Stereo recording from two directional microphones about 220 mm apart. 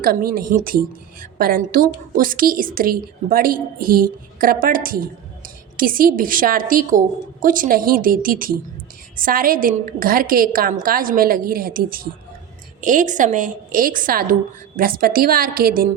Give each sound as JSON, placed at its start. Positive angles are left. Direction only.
{"t": 0.0, "sound": "a woman's voice", "side_deg": -40}